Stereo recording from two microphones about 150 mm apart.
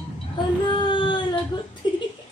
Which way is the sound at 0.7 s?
30° left (ahead or behind).